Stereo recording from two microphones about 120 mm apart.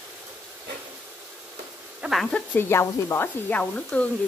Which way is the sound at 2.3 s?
20° left (ahead or behind).